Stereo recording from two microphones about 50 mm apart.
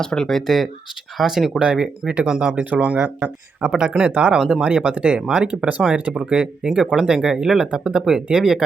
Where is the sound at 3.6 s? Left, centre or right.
Centre.